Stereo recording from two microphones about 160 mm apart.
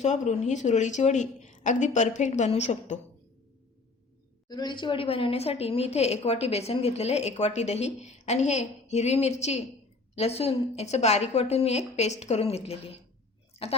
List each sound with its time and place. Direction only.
0.0 s a woman's voice: 45° left (ahead or behind)
4.4 s a woman's voice: 25° left (ahead or behind)